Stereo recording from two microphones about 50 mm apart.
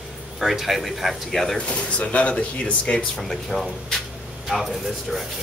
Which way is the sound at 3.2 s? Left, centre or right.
Centre.